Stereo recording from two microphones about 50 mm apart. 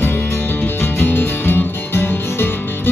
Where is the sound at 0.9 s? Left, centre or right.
Left.